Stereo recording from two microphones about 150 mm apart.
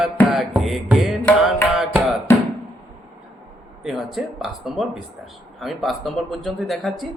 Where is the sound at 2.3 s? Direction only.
15° left (ahead or behind).